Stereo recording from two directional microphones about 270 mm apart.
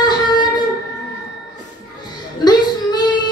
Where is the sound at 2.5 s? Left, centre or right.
Centre.